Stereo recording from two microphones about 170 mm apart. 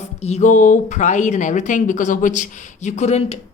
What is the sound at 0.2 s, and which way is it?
A woman's voice, 40° left (ahead or behind).